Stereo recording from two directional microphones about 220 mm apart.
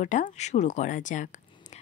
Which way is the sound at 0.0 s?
35° left (ahead or behind).